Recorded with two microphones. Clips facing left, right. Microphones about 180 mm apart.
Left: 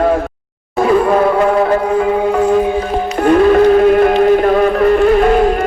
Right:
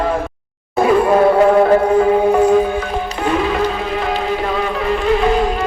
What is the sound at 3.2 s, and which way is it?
Music, 55° left (ahead or behind).